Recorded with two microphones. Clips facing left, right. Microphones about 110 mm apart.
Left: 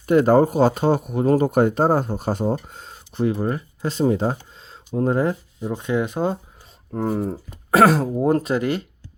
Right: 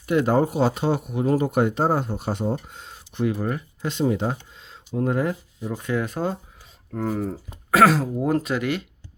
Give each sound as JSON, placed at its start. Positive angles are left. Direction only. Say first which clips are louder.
{"t": 0.0, "sound": "speech", "louder": "left 5 dB", "side_deg": 40}